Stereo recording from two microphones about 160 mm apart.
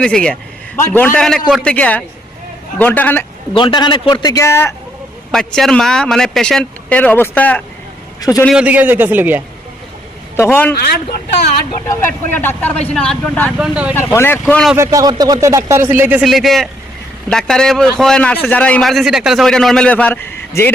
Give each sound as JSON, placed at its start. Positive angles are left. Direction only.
{"t": 0.0, "sound": "a man's voice", "side_deg": 5}
{"t": 1.7, "sound": "a man's voice", "side_deg": 10}
{"t": 3.5, "sound": "a man's voice", "side_deg": 30}
{"t": 5.3, "sound": "a man's voice", "side_deg": 5}
{"t": 8.2, "sound": "a man's voice", "side_deg": 25}
{"t": 8.5, "sound": "speech", "side_deg": -10}
{"t": 10.3, "sound": "a man's voice", "side_deg": 15}
{"t": 11.9, "sound": "a man's voice", "side_deg": 15}
{"t": 13.6, "sound": "speech", "side_deg": -10}
{"t": 13.9, "sound": "a man's voice", "side_deg": 15}
{"t": 14.8, "sound": "speech", "side_deg": -20}
{"t": 16.2, "sound": "a man's voice", "side_deg": 0}